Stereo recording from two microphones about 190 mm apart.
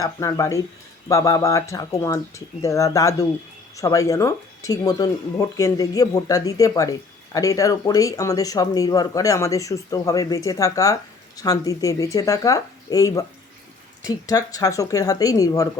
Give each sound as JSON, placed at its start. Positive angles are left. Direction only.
{"t": 0.0, "sound": "speech", "side_deg": 15}